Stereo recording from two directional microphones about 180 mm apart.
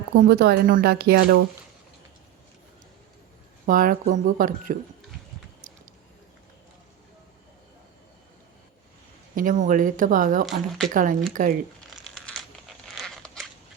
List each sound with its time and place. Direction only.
0.3 s speech: 60° right (ahead or behind)
3.7 s speech: 50° right (ahead or behind)
5.6 s a sound: 50° right (ahead or behind)
9.3 s speech: 50° right (ahead or behind)
10.4 s speech: centre (ahead or behind)
10.9 s speech: 50° right (ahead or behind)
12.0 s a sound: centre (ahead or behind)